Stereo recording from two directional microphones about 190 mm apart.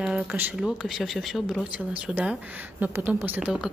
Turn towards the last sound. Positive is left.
turn(degrees=-5)  # may be behind; listen again after turning